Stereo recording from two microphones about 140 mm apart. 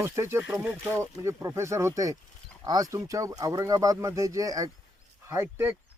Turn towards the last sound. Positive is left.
turn(degrees=-15)  # may be behind; listen again after turning